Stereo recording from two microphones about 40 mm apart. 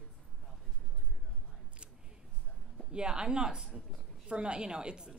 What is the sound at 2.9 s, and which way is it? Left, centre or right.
A woman's voice, right.